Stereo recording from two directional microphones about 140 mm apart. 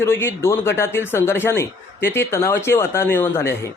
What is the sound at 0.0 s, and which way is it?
A man's voice, 15° left (ahead or behind).